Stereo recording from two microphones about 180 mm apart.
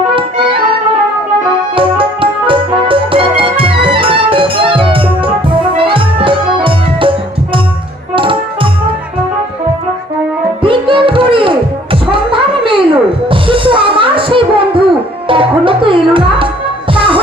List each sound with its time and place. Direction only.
1.7 s music: 30° right (ahead or behind)
8.1 s music: 30° right (ahead or behind)
10.6 s music: 30° right (ahead or behind)